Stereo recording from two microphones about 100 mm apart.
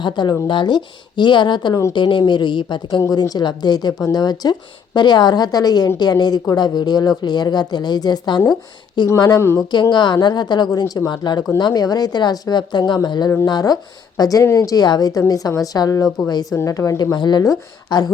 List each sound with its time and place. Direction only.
0.0 s speech: 50° left (ahead or behind)
3.0 s a woman's voice: 40° left (ahead or behind)
9.9 s a woman's voice: 50° left (ahead or behind)